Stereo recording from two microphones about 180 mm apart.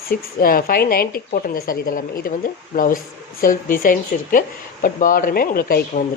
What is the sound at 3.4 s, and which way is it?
Speech, 50° left (ahead or behind).